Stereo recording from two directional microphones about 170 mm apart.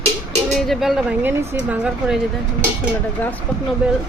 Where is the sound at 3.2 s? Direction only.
10° left (ahead or behind).